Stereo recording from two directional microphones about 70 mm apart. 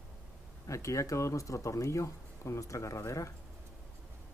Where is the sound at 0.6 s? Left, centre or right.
Left.